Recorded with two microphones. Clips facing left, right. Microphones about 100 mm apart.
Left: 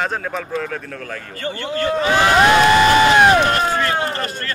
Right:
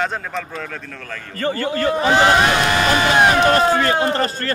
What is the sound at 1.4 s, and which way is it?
Speech, 40° right (ahead or behind).